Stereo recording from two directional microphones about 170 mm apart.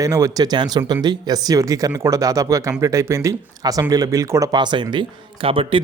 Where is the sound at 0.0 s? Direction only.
20° right (ahead or behind).